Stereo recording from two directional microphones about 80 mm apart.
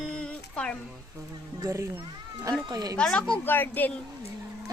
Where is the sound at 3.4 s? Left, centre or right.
Left.